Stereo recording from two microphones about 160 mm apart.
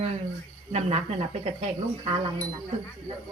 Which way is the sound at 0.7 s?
40° right (ahead or behind).